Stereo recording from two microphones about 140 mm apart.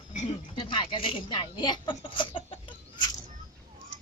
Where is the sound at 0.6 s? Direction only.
35° left (ahead or behind).